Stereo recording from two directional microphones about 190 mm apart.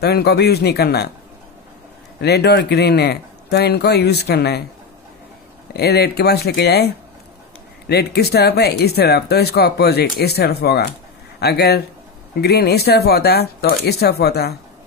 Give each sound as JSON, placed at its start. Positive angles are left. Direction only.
{"t": 0.0, "sound": "speech", "side_deg": 60}
{"t": 2.2, "sound": "speech", "side_deg": 60}
{"t": 5.7, "sound": "speech", "side_deg": 55}